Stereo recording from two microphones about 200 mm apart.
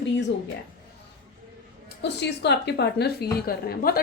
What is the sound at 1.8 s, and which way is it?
A woman's voice, 60° left (ahead or behind).